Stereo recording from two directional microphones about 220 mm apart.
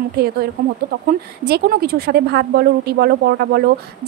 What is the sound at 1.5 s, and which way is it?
A woman's voice, 45° right (ahead or behind).